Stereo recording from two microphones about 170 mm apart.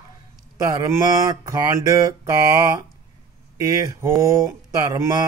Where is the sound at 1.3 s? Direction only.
20° right (ahead or behind).